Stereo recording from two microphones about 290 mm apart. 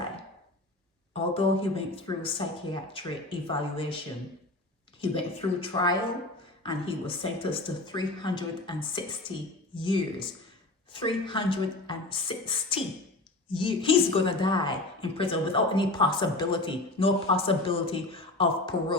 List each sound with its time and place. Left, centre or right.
1.1 s a woman's voice: centre
4.9 s a woman's voice: centre
9.7 s a woman's voice: centre